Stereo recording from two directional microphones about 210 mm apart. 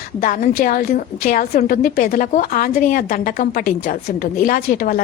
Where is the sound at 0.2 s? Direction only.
40° left (ahead or behind).